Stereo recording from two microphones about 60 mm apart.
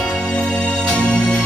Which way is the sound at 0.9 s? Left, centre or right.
Centre.